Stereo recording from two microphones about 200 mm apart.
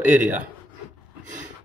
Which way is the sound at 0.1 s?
10° right (ahead or behind).